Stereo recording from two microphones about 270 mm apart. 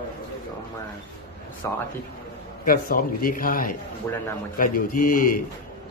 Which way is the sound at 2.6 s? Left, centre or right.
Left.